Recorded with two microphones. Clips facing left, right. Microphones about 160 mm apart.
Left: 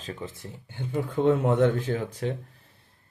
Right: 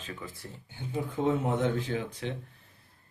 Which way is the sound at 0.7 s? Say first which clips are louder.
Left 5 dB; 65° left (ahead or behind).